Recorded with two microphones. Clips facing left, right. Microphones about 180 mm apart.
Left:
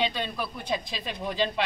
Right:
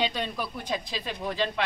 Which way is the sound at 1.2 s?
20° left (ahead or behind).